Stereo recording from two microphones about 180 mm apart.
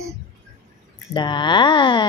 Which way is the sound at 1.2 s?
25° left (ahead or behind).